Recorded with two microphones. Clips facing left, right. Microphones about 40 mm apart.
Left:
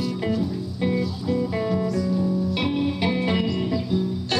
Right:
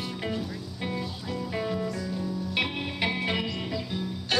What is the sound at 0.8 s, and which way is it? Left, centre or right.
Music, centre.